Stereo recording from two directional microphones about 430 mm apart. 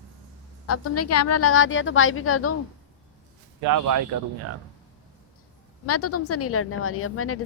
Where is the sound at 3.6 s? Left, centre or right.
Right.